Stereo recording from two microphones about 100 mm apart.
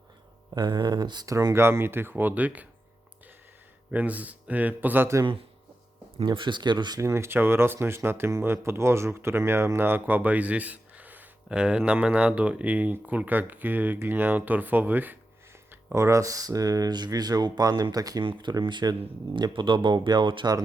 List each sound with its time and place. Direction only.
0.5 s speech: 45° right (ahead or behind); by 2.6 s 15° right (ahead or behind)
3.9 s speech: 15° right (ahead or behind)
6.2 s speech: 50° right (ahead or behind)
7.0 s speech: 25° right (ahead or behind)
16.0 s speech: 30° right (ahead or behind)
18.2 s speech: 55° right (ahead or behind)